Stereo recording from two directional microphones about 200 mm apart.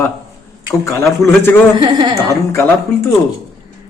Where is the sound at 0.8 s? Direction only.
15° left (ahead or behind).